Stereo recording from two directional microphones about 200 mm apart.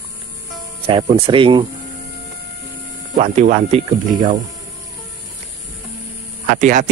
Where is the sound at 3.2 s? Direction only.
35° right (ahead or behind).